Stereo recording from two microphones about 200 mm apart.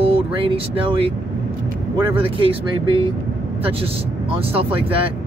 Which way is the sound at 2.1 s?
25° right (ahead or behind).